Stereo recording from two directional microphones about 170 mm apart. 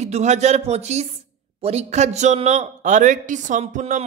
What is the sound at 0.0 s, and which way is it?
A man's voice, 45° right (ahead or behind).